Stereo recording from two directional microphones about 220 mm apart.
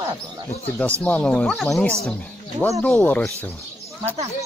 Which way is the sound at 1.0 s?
5° left (ahead or behind).